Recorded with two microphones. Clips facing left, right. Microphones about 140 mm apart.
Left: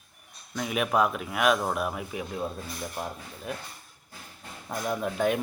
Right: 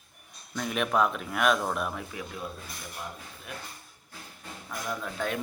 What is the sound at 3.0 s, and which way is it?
Speech, 45° left (ahead or behind).